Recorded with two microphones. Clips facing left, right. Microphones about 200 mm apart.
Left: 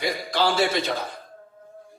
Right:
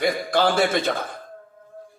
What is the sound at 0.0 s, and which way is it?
A man's voice, 50° right (ahead or behind).